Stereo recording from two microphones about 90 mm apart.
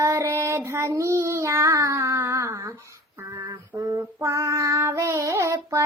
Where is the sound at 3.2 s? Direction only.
40° right (ahead or behind).